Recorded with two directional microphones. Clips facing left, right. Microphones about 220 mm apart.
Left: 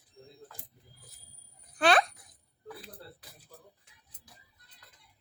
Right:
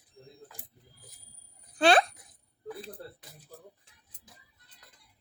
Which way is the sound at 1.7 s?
30° right (ahead or behind).